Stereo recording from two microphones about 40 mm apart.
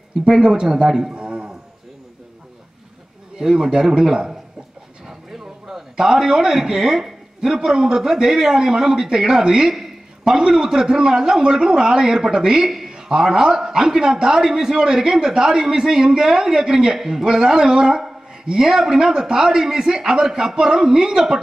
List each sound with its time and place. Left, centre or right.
0.3 s a man's voice: centre
1.1 s a sound: right
3.3 s a man's voice: centre
12.9 s a man's voice: centre